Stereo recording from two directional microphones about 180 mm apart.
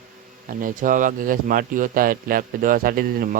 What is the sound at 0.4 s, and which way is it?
Speech, 50° right (ahead or behind).